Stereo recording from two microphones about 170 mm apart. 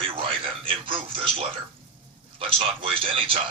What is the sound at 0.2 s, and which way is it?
Television, 30° right (ahead or behind).